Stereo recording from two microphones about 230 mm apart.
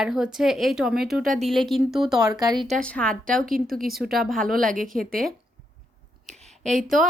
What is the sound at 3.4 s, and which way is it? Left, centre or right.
Speech, right.